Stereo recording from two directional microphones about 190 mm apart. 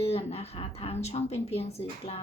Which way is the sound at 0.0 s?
30° left (ahead or behind).